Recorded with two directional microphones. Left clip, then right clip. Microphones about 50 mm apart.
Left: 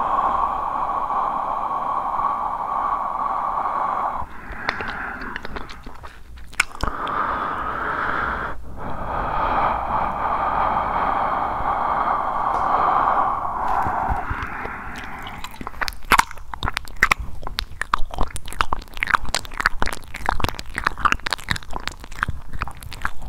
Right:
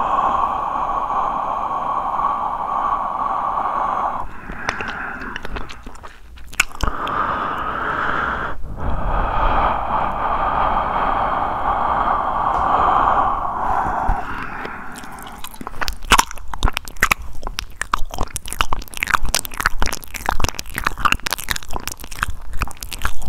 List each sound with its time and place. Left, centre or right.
0.0 s a sound: centre
6.5 s chewing: centre
14.7 s biting: right
16.1 s crunch: right
17.0 s biting: right
17.7 s chewing: centre
22.6 s biting: right